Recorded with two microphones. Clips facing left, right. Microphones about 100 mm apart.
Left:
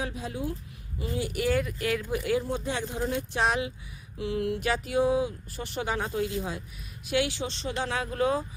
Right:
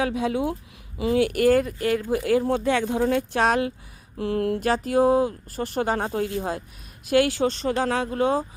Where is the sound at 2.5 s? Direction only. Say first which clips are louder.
Right 9 dB; 65° right (ahead or behind).